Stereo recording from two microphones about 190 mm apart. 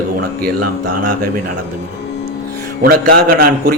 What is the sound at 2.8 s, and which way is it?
Speech, 50° right (ahead or behind).